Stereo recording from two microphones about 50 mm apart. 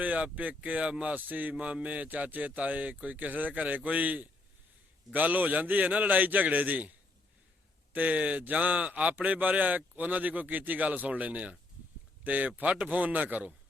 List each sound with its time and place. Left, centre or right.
0.0 s speech: right
1.1 s speech: right
7.9 s speech: right